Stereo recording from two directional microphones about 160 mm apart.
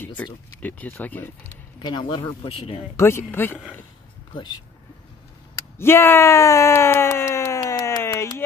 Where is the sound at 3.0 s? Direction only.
15° left (ahead or behind).